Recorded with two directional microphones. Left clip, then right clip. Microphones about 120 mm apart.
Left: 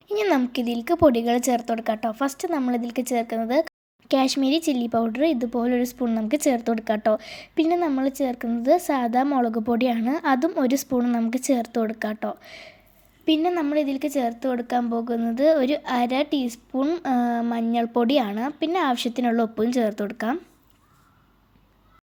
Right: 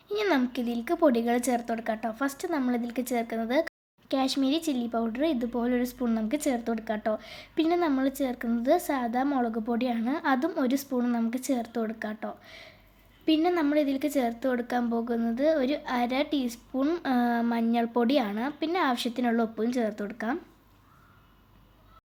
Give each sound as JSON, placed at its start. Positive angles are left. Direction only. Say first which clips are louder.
{"t": 0.1, "sound": "a woman's voice", "louder": "left 5 dB", "side_deg": 35}
{"t": 4.1, "sound": "a woman's voice", "louder": "left 6 dB", "side_deg": 40}
{"t": 9.0, "sound": "speech", "louder": "left 6 dB", "side_deg": 45}
{"t": 11.3, "sound": "a woman's voice", "louder": "left 7 dB", "side_deg": 50}
{"t": 15.4, "sound": "a woman's voice", "louder": "left 7 dB", "side_deg": 45}
{"t": 16.8, "sound": "a woman's voice", "louder": "left 3 dB", "side_deg": 20}